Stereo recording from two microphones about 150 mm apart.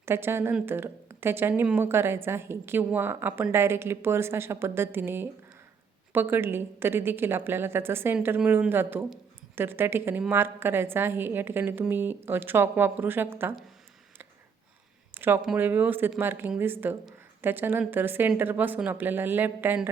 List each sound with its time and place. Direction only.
0.0 s speech: 15° right (ahead or behind)
15.1 s a sound: 15° right (ahead or behind)
15.5 s speech: 15° right (ahead or behind)